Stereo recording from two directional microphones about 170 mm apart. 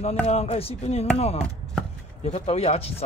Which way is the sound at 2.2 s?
35° left (ahead or behind).